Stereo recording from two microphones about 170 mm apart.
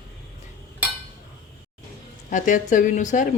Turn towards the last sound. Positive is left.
turn(degrees=50)  # may be behind; listen again after turning